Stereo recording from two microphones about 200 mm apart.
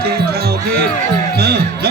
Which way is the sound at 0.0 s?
50° right (ahead or behind).